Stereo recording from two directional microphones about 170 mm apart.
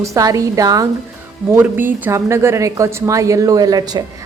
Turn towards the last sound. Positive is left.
turn(degrees=-20)  # may be behind; listen again after turning